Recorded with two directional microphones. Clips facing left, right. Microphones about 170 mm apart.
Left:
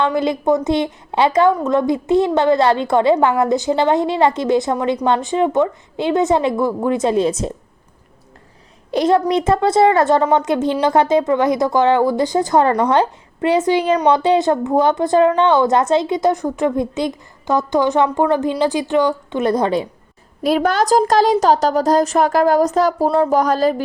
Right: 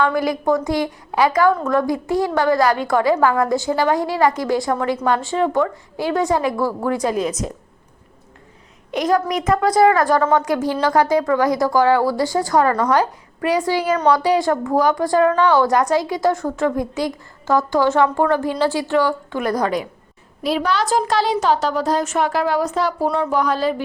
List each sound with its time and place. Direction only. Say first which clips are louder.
0.0 s a woman's voice: left 1 dB; 25° left (ahead or behind)
8.9 s a woman's voice: left 4 dB; 30° left (ahead or behind)
20.4 s a woman's voice: left 4 dB; 50° left (ahead or behind)